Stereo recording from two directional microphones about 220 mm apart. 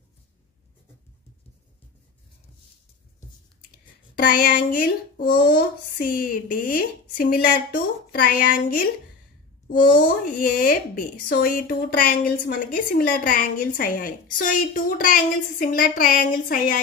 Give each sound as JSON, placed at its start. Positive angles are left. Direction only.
{"t": 3.8, "sound": "a woman's voice", "side_deg": 40}
{"t": 9.8, "sound": "a woman's voice", "side_deg": 35}